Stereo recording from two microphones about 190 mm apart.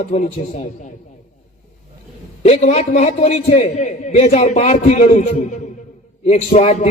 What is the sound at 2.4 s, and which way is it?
A man's voice, 35° left (ahead or behind).